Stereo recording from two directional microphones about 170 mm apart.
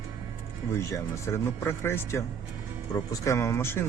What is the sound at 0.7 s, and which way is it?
Speech, 15° left (ahead or behind).